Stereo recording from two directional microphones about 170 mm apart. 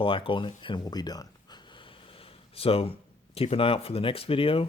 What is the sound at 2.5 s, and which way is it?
Speech, 35° left (ahead or behind).